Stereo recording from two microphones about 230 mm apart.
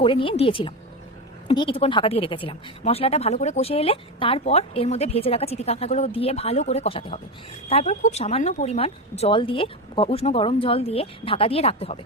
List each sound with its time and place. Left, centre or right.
0.0 s a woman's voice: left